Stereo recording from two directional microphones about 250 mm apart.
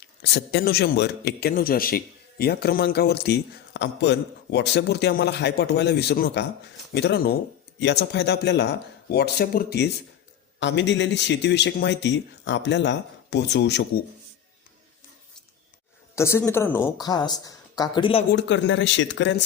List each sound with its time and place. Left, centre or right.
0.2 s a man's voice: left
16.1 s speech: centre
18.3 s speech: left